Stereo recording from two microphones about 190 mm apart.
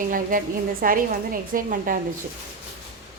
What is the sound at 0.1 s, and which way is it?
A woman's voice, 45° right (ahead or behind).